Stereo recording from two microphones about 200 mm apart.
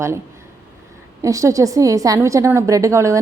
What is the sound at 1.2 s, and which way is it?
A woman's voice, 15° right (ahead or behind).